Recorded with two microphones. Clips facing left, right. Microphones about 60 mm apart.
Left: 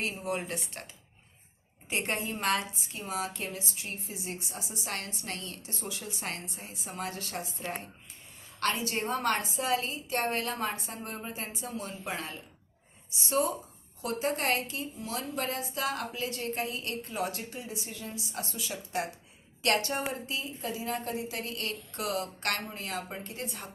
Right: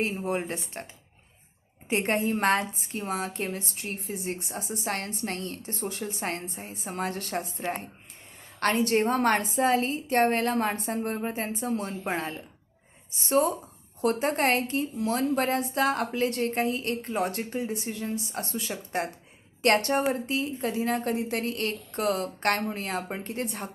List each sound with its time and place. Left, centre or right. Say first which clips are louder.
0.0 s speech: right 5 dB; right
1.9 s a woman's voice: right 7 dB; right
8.6 s a woman's voice: right 7 dB; right